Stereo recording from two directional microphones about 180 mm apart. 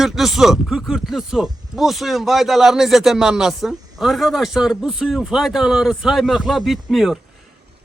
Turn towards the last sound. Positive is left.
turn(degrees=0)  # may be behind; listen again after turning